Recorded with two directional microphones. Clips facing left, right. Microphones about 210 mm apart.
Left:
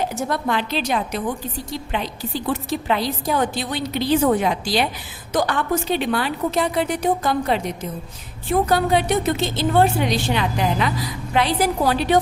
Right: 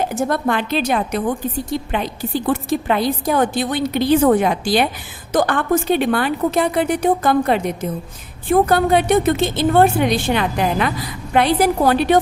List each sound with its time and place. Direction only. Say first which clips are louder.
0.0 s a woman's voice: right 4 dB; 50° right (ahead or behind)